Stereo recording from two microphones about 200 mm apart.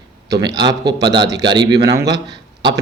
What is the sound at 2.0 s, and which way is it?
Speech, 60° right (ahead or behind).